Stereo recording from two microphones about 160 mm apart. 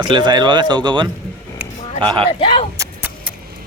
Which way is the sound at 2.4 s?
35° left (ahead or behind).